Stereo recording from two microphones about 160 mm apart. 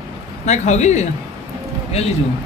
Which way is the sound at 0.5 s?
45° left (ahead or behind).